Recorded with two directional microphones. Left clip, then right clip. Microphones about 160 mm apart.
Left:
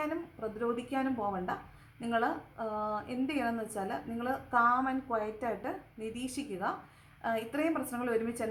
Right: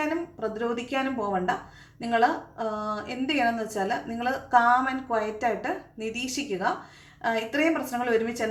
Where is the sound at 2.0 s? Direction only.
15° left (ahead or behind).